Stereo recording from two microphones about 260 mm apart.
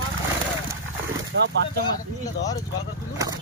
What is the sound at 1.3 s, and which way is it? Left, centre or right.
Speech, right.